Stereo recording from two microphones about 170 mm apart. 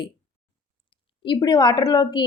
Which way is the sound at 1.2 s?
25° left (ahead or behind).